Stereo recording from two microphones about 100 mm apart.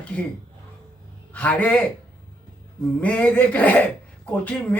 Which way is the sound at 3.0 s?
15° left (ahead or behind).